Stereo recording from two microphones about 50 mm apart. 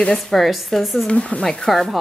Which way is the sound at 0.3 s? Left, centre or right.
Centre.